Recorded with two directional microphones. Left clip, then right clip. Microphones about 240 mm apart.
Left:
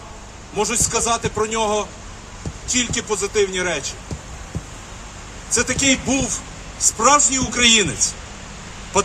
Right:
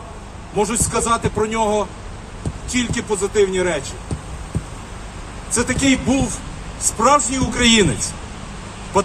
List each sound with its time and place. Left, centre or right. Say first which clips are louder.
0.5 s a man's voice: right 1 dB; left
5.5 s a man's voice: even; left